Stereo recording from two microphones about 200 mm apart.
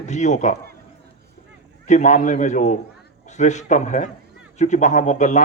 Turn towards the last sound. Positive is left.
turn(degrees=35)  # may be behind; listen again after turning